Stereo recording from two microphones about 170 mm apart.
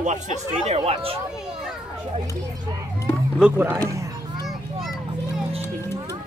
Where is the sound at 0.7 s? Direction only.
35° right (ahead or behind).